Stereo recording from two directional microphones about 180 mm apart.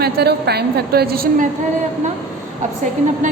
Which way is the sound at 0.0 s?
65° right (ahead or behind).